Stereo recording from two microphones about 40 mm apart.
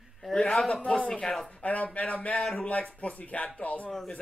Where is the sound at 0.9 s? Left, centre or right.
Left.